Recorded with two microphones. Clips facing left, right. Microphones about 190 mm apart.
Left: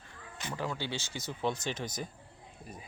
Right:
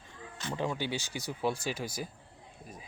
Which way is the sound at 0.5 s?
20° right (ahead or behind).